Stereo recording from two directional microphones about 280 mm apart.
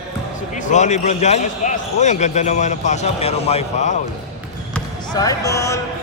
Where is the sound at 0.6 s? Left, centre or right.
Left.